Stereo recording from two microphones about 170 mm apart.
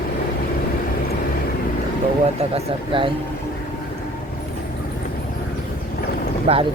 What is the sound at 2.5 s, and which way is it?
Speech, 30° right (ahead or behind).